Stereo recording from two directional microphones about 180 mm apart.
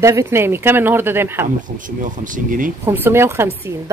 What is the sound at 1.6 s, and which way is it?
Speech, 45° right (ahead or behind).